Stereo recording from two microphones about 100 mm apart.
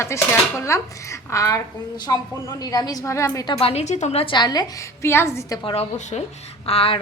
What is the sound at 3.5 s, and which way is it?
Speech, 85° left.